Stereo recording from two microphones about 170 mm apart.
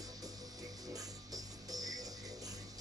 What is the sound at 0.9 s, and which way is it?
Music, 20° right (ahead or behind).